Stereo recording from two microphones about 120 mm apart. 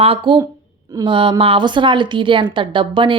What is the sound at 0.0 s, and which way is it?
Speech, 45° right (ahead or behind).